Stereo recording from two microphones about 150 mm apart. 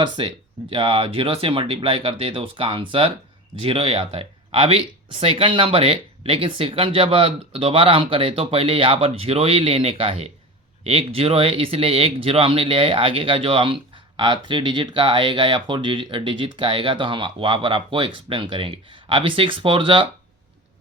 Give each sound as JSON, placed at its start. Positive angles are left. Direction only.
{"t": 0.0, "sound": "speech", "side_deg": -35}